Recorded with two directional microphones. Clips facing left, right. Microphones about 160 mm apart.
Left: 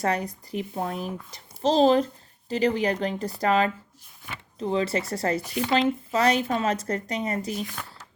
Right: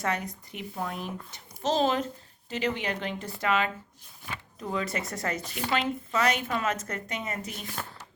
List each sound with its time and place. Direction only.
0.0 s speech: 35° left (ahead or behind)